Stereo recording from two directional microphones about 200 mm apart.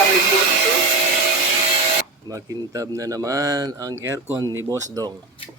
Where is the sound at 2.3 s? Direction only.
15° right (ahead or behind).